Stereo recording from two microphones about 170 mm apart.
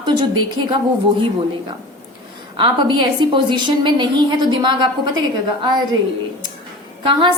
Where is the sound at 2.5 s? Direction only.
25° right (ahead or behind).